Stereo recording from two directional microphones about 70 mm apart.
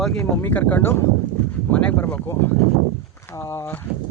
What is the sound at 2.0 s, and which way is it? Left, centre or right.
Speech, left.